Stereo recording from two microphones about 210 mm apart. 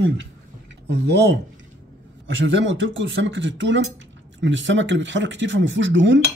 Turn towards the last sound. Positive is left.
turn(degrees=-60)  # may be behind; listen again after turning